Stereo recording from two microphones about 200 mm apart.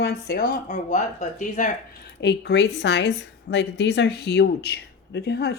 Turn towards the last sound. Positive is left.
turn(degrees=55)  # may be behind; listen again after turning